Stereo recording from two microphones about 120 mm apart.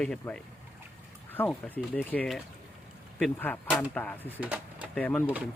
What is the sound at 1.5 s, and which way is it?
Speech, 10° left (ahead or behind).